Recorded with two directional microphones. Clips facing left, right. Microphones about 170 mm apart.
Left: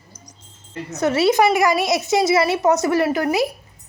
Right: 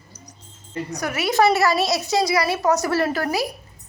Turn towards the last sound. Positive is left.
turn(degrees=20)  # may be behind; listen again after turning